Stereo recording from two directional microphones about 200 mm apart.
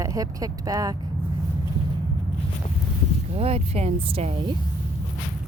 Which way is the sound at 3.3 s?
30° right (ahead or behind).